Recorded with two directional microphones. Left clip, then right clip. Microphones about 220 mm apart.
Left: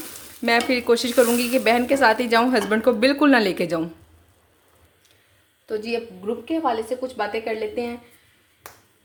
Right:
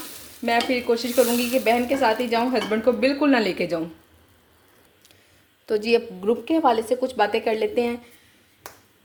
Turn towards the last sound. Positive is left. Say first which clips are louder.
# right 4 dB
turn(degrees=-40)  # may be behind; listen again after turning